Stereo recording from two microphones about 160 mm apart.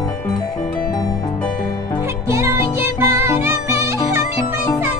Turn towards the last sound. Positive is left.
turn(degrees=-15)  # may be behind; listen again after turning